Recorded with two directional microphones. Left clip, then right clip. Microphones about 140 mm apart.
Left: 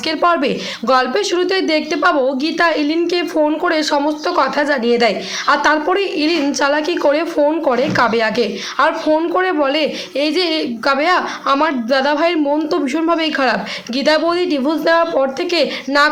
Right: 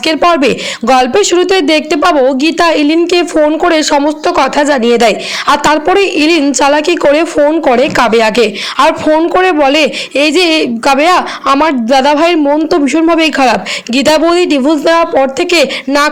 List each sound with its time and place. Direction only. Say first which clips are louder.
0.0 s speech: right 7 dB; 60° right (ahead or behind)